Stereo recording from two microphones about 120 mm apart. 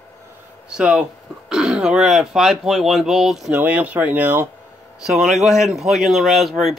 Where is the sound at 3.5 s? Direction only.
15° right (ahead or behind).